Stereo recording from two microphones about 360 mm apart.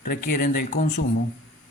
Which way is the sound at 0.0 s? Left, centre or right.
Left.